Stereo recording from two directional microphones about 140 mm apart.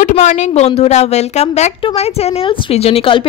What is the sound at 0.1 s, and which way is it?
A woman's voice, 55° left (ahead or behind).